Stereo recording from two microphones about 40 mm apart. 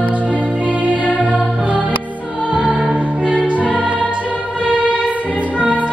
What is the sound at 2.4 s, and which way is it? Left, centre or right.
Music, right.